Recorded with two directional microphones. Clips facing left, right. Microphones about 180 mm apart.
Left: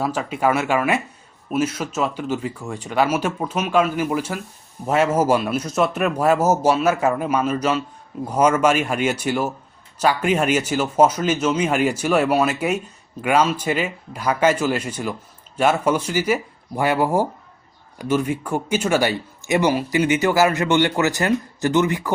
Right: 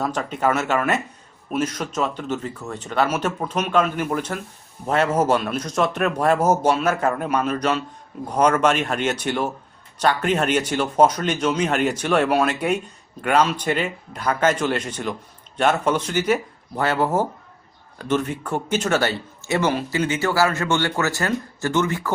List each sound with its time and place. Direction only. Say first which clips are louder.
0.0 s speech: left 1 dB; 5° left (ahead or behind)